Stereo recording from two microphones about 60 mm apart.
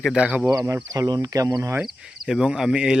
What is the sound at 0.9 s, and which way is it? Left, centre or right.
Speech, right.